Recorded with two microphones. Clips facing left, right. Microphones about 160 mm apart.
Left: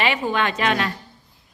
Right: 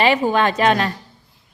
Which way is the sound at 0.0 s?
35° right (ahead or behind).